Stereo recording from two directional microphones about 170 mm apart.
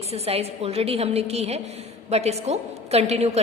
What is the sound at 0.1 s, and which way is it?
A woman's voice, 35° right (ahead or behind).